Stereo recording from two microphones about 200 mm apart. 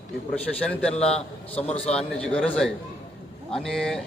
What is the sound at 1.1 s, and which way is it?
Speech, 30° left (ahead or behind).